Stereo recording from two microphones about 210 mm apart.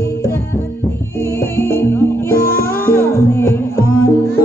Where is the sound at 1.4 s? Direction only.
10° left (ahead or behind).